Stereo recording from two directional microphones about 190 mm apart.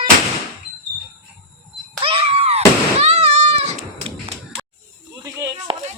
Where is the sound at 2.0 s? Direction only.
30° right (ahead or behind).